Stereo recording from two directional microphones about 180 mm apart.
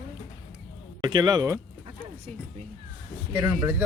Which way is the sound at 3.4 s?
10° right (ahead or behind).